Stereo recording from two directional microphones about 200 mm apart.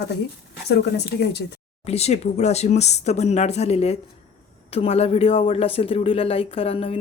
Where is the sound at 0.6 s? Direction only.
55° left (ahead or behind).